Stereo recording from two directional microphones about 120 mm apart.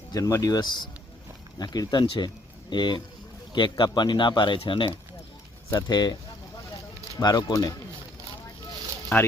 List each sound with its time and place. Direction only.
0.1 s speech: 25° left (ahead or behind); by 4.9 s 45° left (ahead or behind)
5.9 s speech: 35° left (ahead or behind)
7.2 s speech: 35° left (ahead or behind)
9.1 s speech: 15° left (ahead or behind)